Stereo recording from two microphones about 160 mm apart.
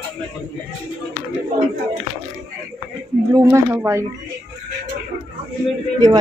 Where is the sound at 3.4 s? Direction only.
15° right (ahead or behind).